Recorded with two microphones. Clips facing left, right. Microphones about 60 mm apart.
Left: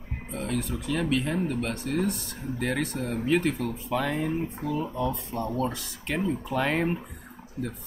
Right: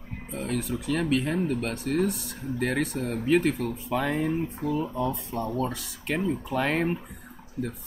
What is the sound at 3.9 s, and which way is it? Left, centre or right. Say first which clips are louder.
Speech: right 1 dB; centre.